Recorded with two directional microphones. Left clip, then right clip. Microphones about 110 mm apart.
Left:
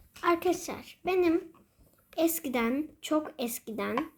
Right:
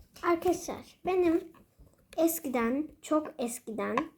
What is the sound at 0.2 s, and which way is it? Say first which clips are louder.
A child's voice: left 1 dB; 35° left (ahead or behind).